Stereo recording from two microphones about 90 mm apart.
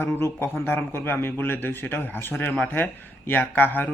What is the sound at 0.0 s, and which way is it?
A man's voice, 25° left (ahead or behind).